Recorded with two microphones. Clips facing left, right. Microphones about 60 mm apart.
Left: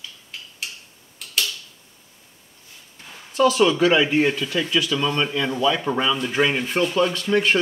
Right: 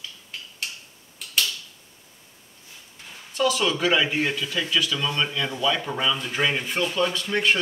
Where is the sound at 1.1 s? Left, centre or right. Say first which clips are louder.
Even; centre.